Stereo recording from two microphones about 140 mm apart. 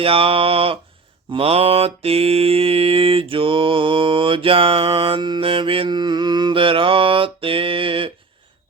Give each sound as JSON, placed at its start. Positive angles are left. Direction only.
{"t": 0.0, "sound": "mantra", "side_deg": -40}